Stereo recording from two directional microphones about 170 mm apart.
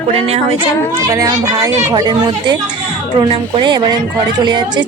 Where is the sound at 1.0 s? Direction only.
20° right (ahead or behind).